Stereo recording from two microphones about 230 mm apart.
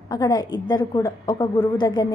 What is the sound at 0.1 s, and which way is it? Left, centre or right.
A woman's voice, centre.